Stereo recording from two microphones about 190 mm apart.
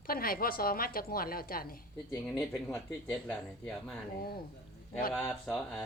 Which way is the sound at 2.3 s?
10° left (ahead or behind).